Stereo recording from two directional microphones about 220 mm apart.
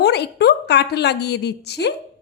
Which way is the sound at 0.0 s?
50° left (ahead or behind).